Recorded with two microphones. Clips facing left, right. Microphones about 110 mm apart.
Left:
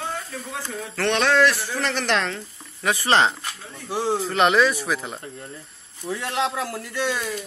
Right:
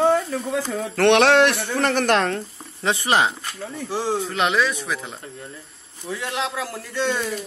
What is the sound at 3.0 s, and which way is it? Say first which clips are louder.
Speech: left 1 dB; 10° right (ahead or behind).